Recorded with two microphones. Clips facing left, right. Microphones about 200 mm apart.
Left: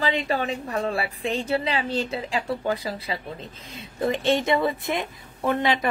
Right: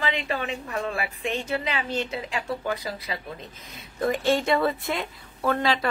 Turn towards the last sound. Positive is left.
turn(degrees=20)  # may be behind; listen again after turning